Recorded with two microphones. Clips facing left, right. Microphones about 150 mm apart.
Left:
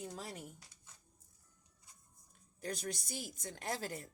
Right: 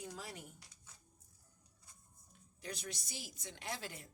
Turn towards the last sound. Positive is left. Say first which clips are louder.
# left 5 dB
turn(degrees=40)  # may be behind; listen again after turning